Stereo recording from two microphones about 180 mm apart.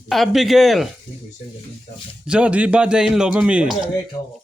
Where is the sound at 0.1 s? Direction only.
Centre (ahead or behind).